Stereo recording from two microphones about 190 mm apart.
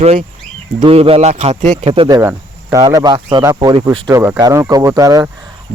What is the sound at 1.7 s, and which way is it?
Speech, 25° right (ahead or behind).